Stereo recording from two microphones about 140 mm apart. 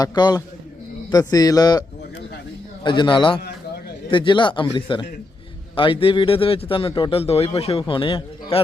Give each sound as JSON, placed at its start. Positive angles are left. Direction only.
{"t": 0.0, "sound": "speech", "side_deg": 30}
{"t": 2.8, "sound": "a man's voice", "side_deg": 35}